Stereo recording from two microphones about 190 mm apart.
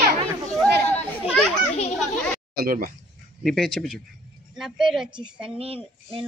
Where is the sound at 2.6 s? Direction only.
50° right (ahead or behind).